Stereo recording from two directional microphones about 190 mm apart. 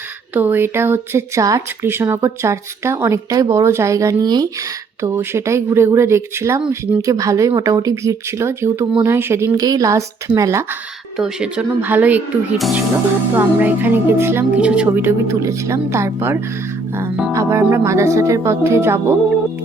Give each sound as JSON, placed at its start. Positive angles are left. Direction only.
{"t": 0.3, "sound": "speech", "side_deg": -10}